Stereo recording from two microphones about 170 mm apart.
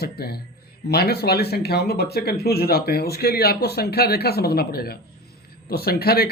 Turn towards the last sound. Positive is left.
turn(degrees=65)  # may be behind; listen again after turning